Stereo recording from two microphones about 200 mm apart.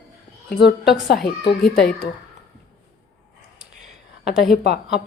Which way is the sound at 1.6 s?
Centre (ahead or behind).